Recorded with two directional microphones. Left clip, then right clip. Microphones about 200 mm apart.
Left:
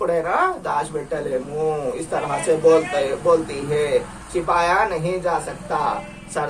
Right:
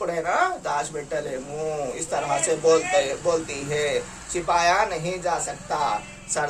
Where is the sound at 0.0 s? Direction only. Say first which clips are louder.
Left 4 dB; 25° right (ahead or behind).